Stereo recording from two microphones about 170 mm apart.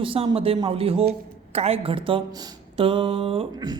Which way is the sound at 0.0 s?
30° right (ahead or behind).